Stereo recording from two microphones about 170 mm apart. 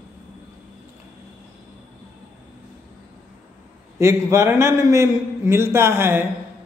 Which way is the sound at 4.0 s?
15° right (ahead or behind).